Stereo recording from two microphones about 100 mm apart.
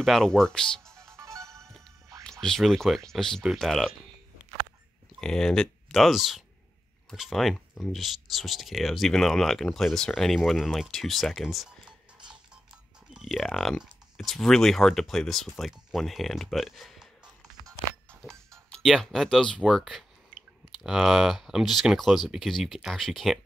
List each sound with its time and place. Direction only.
0.0 s speech: 5° left (ahead or behind)
1.0 s music: 30° right (ahead or behind)
2.4 s speech: 5° left (ahead or behind)
5.2 s speech: 5° left (ahead or behind)
13.1 s speech: centre (ahead or behind)
18.5 s speech: 5° left (ahead or behind)